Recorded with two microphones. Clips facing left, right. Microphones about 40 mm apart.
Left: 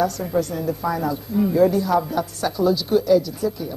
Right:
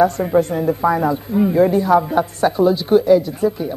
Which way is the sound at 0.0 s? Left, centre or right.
Right.